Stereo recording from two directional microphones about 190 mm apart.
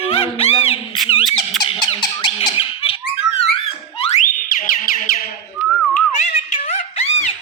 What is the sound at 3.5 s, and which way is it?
Music, 30° left (ahead or behind).